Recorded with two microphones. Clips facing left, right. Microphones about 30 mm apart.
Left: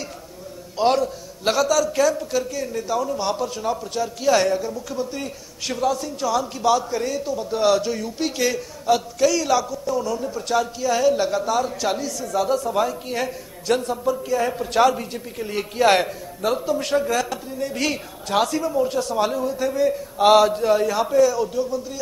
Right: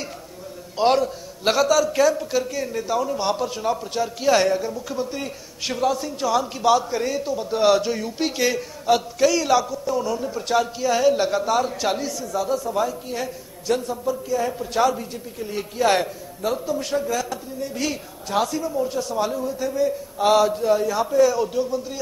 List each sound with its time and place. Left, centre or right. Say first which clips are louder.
0.7 s a man's voice: even; centre
12.4 s a man's voice: left 2 dB; centre
21.2 s a man's voice: right 1 dB; centre